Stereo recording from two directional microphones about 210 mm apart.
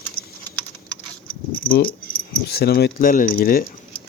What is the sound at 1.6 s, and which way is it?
Speech, 40° left (ahead or behind).